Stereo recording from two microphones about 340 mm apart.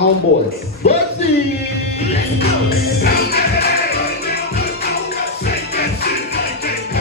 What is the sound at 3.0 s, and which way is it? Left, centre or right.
Music, left.